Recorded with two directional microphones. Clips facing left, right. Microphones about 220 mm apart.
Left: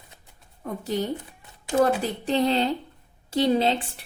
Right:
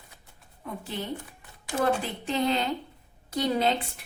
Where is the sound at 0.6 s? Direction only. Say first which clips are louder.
Left 7 dB; 40° left (ahead or behind).